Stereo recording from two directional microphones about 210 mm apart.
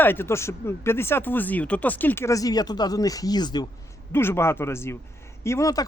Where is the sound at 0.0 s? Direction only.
10° left (ahead or behind).